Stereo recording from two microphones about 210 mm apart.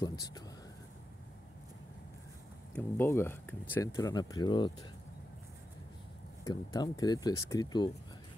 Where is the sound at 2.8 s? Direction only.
10° left (ahead or behind).